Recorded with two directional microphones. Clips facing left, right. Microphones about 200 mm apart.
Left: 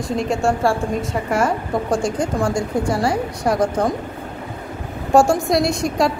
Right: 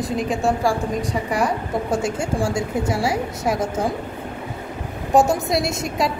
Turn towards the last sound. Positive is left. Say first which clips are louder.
# left 4 dB
turn(degrees=0)  # may be behind; listen again after turning